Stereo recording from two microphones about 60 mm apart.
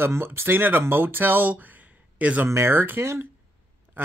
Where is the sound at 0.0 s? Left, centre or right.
Right.